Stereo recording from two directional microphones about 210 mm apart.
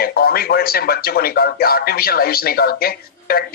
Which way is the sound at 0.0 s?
45° left (ahead or behind).